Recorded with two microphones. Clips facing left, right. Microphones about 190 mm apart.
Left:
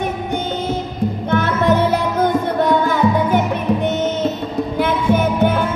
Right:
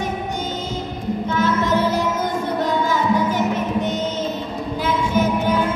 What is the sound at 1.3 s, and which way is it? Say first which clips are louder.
Music: left 3 dB; 60° left (ahead or behind).